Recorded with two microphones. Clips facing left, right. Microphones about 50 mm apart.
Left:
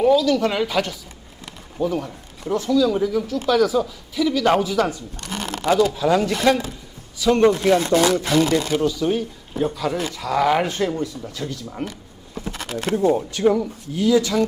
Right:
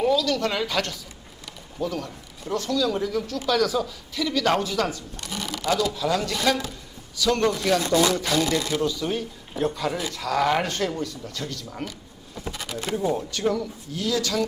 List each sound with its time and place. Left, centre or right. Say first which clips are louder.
0.0 s speech: left 6 dB; centre
5.2 s a sound: left 4 dB; left
5.9 s speech: left 6 dB; left
8.1 s speech: left 5 dB; left
8.7 s speech: left 5 dB; centre
9.0 s a man's voice: left 6 dB; centre
11.9 s a sound: left 3 dB; left
12.8 s speech: left 6 dB; left
13.1 s speech: left 7 dB; centre